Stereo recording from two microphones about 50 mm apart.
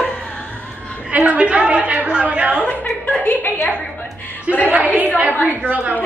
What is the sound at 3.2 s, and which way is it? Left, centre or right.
Speech, left.